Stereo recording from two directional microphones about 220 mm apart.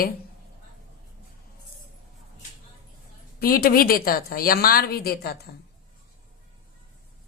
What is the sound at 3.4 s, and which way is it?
A woman's voice, 40° left (ahead or behind).